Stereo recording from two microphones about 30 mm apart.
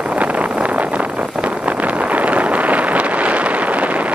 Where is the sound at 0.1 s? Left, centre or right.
Right.